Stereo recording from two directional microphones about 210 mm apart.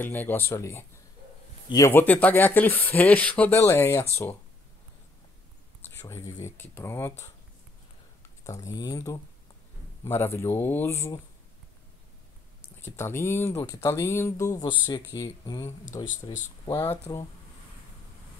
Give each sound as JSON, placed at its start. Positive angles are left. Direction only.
{"t": 0.0, "sound": "speech", "side_deg": 10}
{"t": 5.9, "sound": "speech", "side_deg": 10}
{"t": 8.5, "sound": "speech", "side_deg": 15}
{"t": 12.8, "sound": "speech", "side_deg": 10}